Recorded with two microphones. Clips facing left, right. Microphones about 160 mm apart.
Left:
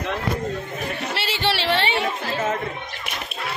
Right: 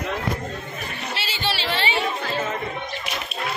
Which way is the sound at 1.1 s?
70° left (ahead or behind).